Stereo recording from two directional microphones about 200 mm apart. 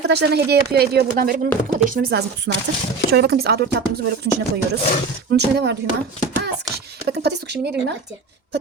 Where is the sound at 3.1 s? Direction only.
55° right (ahead or behind).